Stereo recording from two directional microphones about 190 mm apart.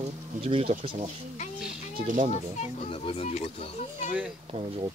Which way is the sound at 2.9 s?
30° left (ahead or behind).